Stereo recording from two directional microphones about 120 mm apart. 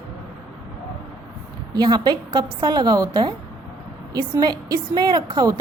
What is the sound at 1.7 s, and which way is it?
Speech, 35° right (ahead or behind).